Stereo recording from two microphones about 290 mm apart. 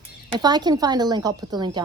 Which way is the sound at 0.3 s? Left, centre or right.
Centre.